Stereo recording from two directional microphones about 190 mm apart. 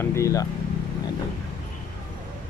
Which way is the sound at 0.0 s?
15° left (ahead or behind).